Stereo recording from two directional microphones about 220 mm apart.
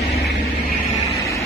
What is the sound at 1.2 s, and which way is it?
Vehicle, 15° left (ahead or behind).